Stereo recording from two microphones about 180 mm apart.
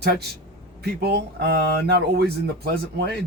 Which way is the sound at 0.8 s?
65° right (ahead or behind).